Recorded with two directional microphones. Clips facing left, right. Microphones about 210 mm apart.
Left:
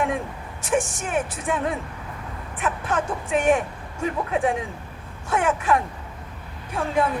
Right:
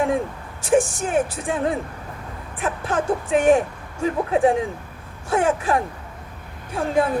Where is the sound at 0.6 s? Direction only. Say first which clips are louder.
Right 5 dB; 30° right (ahead or behind).